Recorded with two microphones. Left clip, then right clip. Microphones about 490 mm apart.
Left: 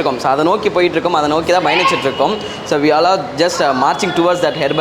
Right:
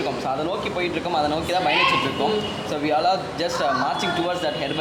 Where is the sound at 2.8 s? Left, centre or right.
Left.